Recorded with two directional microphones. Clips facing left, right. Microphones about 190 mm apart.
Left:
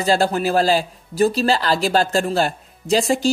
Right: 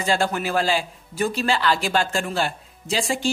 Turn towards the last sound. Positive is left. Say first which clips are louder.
# left 7 dB
turn(degrees=40)  # may be behind; listen again after turning